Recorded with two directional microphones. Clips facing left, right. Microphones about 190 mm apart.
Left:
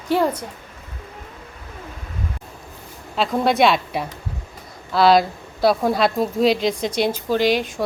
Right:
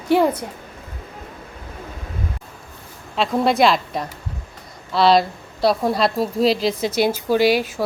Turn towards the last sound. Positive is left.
turn(degrees=-5)  # may be behind; listen again after turning